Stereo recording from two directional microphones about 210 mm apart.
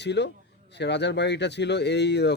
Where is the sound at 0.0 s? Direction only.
55° left (ahead or behind).